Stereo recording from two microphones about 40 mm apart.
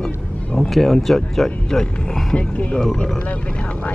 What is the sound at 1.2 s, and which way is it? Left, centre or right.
Speech, centre.